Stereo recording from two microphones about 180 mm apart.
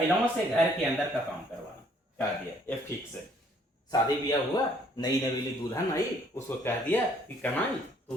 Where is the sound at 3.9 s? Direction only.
20° left (ahead or behind).